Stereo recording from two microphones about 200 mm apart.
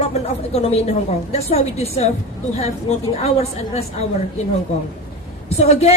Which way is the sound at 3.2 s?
30° left (ahead or behind).